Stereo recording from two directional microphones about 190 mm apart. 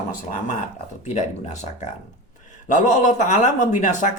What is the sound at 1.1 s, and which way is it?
Speech, 35° left (ahead or behind).